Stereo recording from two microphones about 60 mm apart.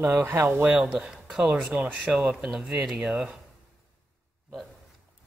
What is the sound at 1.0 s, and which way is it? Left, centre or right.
Speech, centre.